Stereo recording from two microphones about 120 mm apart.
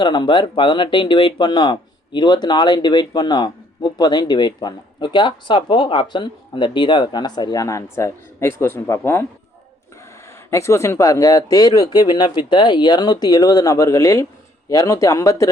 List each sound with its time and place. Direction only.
0.0 s speech: 40° left (ahead or behind); by 9.2 s 20° left (ahead or behind)
10.5 s speech: 25° left (ahead or behind)